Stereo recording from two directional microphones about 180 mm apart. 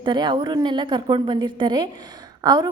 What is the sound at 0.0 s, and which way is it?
A woman's voice, 25° right (ahead or behind).